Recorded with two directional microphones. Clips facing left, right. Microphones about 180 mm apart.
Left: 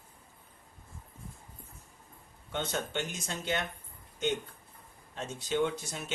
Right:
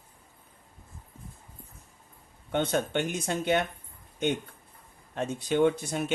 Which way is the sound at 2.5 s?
55° right (ahead or behind).